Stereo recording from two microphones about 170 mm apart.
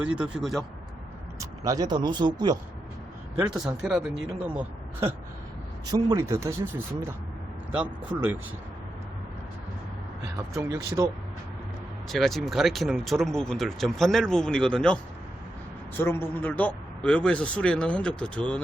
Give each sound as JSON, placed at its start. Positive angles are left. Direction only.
{"t": 0.0, "sound": "speech", "side_deg": -5}
{"t": 1.4, "sound": "speech", "side_deg": -20}
{"t": 3.3, "sound": "speech", "side_deg": -5}
{"t": 5.8, "sound": "speech", "side_deg": -25}
{"t": 7.7, "sound": "speech", "side_deg": -5}
{"t": 10.5, "sound": "speech", "side_deg": -20}
{"t": 12.0, "sound": "speech", "side_deg": 0}
{"t": 16.0, "sound": "a man's voice", "side_deg": 15}